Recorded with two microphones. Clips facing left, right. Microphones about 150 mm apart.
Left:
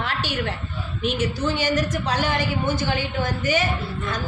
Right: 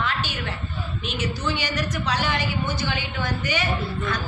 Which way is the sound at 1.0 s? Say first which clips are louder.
Left 5 dB; 50° left (ahead or behind).